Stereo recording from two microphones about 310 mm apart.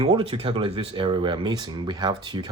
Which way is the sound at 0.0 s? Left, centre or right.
Centre.